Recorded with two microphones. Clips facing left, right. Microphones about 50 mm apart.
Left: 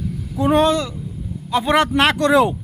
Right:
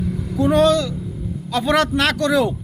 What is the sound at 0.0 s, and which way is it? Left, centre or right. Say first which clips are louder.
Vehicle: right 3 dB; right.